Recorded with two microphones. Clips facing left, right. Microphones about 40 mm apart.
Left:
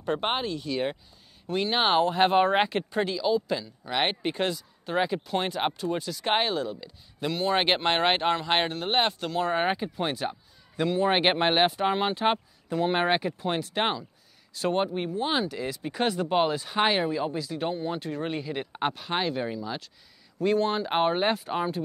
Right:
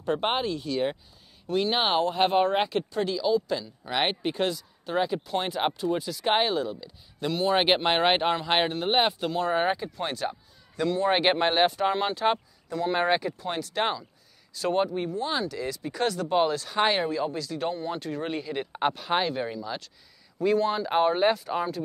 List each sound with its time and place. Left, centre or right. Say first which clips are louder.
0.0 s a man's voice: right 1 dB; centre
9.7 s speech: left 1 dB; centre
20.4 s speech: right 1 dB; centre